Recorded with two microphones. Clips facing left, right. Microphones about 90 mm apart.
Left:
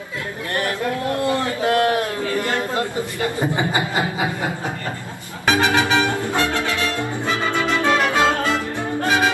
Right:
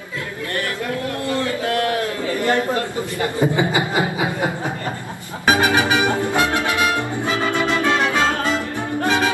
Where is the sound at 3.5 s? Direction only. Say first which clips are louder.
Right 2 dB; 20° right (ahead or behind).